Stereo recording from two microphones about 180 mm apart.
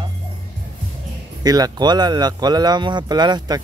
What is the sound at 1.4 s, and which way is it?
Speech, 20° right (ahead or behind).